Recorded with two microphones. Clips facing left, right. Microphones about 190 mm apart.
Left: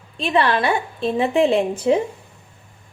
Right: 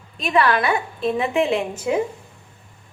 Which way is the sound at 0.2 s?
30° left (ahead or behind).